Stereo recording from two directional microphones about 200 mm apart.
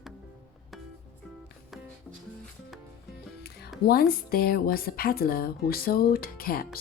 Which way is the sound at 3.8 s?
50° left (ahead or behind).